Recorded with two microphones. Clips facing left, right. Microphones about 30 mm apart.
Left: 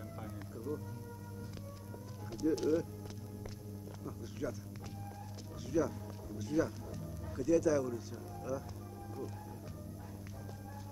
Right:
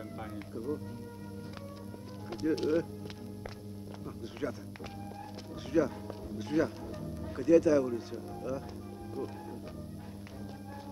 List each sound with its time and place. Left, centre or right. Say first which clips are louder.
0.2 s music: right 5 dB; right
2.3 s speech: right 2 dB; right
4.4 s speech: right 3 dB; right
5.7 s speech: right 5 dB; right